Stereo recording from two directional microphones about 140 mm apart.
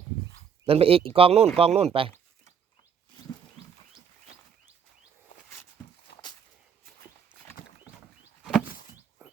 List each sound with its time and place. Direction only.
0.6 s speech: 45° right (ahead or behind)